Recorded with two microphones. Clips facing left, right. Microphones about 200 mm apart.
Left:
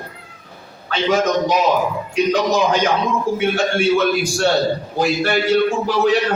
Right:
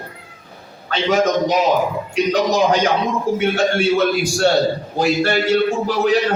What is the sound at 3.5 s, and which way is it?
Speech, 35° right (ahead or behind).